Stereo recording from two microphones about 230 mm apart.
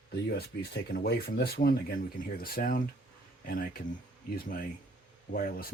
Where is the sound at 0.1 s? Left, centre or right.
Left.